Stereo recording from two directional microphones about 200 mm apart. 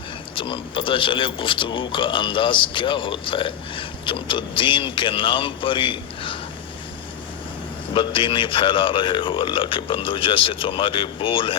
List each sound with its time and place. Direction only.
0.3 s speech: 25° left (ahead or behind)
7.9 s speech: 25° left (ahead or behind)